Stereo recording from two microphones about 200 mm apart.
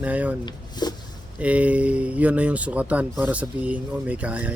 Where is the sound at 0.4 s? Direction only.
20° left (ahead or behind).